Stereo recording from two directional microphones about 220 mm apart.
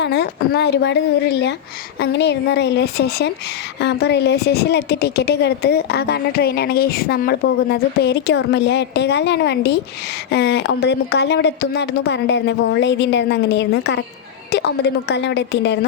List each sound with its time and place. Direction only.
0.0 s a woman's voice: 50° left (ahead or behind)